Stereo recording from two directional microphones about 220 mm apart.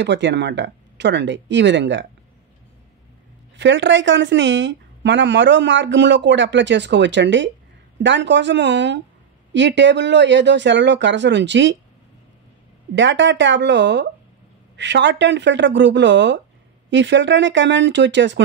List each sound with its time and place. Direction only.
0.0 s speech: 55° right (ahead or behind)
3.5 s speech: 55° right (ahead or behind)
12.9 s speech: 55° right (ahead or behind)